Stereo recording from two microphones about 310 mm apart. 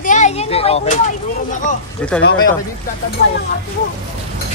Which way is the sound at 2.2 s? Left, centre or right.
Left.